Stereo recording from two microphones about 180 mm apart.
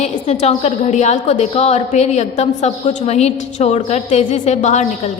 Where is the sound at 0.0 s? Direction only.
40° left (ahead or behind).